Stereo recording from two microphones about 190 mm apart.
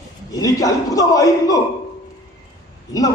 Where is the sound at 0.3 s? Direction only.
20° left (ahead or behind).